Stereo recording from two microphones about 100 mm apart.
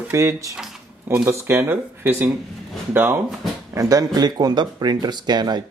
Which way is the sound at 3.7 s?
35° right (ahead or behind).